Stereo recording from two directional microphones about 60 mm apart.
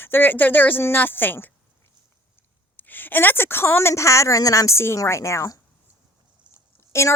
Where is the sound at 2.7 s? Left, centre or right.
Left.